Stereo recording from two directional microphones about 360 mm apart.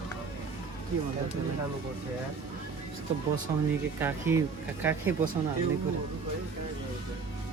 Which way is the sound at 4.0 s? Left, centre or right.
Centre.